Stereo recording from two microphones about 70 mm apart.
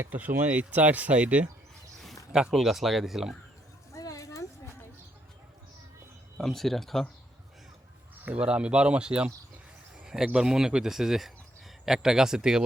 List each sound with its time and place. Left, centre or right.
0.0 s speech: right
2.3 s speech: centre
3.9 s a sound: left
6.4 s speech: centre
8.2 s speech: centre
9.9 s a sound: centre
10.2 s speech: centre